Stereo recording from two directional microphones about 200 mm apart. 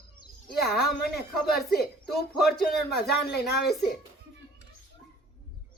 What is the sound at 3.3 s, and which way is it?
Speech, 55° left (ahead or behind).